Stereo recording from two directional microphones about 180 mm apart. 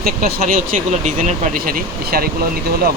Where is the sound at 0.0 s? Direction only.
55° right (ahead or behind).